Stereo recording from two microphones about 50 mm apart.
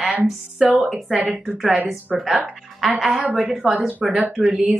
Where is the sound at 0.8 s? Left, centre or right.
Centre.